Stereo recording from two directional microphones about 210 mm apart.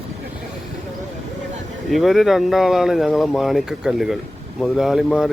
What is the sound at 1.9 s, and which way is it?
Speech, centre (ahead or behind).